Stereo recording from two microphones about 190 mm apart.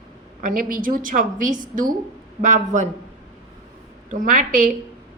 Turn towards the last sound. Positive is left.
turn(degrees=-45)  # may be behind; listen again after turning